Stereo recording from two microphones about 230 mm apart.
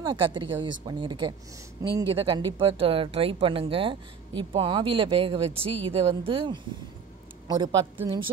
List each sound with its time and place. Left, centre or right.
0.0 s speech: right